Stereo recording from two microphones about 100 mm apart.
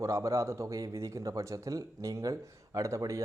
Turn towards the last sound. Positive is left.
turn(degrees=-30)  # may be behind; listen again after turning